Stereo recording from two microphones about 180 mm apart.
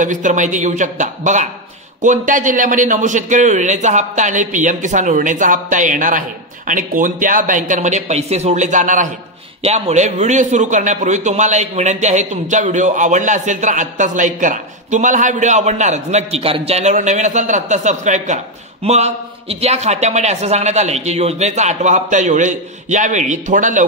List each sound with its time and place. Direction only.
0.0 s a man's voice: 45° right (ahead or behind)